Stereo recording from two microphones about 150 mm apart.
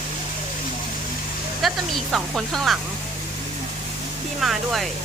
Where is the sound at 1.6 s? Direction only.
Centre (ahead or behind).